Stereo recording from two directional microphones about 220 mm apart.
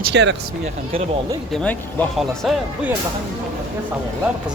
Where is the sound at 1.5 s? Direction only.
5° left (ahead or behind).